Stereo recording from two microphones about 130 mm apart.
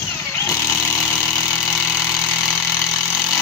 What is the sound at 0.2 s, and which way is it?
Chainsaw, 20° left (ahead or behind).